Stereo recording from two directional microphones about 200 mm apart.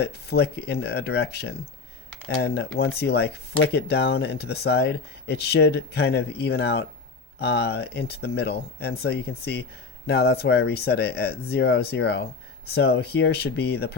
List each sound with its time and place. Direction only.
0.0 s speech: 55° left (ahead or behind)